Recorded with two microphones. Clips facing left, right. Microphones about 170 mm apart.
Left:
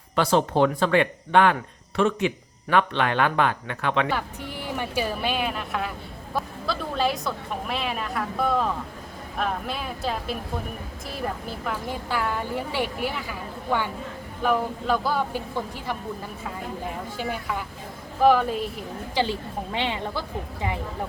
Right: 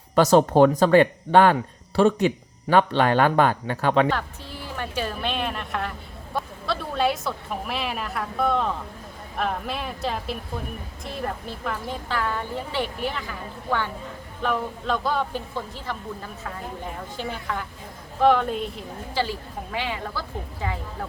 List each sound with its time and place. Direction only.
0.2 s speech: 45° right (ahead or behind)
4.8 s a woman's voice: 10° left (ahead or behind)
11.6 s a woman's voice: 5° left (ahead or behind)
17.2 s a woman's voice: 10° left (ahead or behind)
19.1 s a woman's voice: 20° left (ahead or behind)